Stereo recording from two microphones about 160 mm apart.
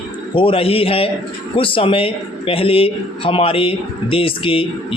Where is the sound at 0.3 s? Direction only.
35° left (ahead or behind).